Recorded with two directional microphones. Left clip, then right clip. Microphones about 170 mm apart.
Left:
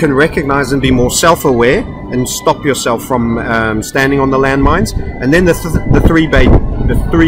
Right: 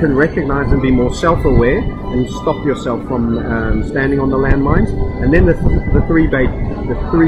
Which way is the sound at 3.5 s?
25° left (ahead or behind).